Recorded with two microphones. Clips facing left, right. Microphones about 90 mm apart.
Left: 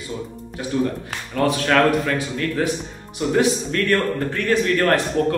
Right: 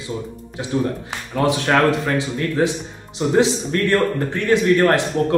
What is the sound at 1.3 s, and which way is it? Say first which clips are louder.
Speech: right 1 dB; 20° right (ahead or behind).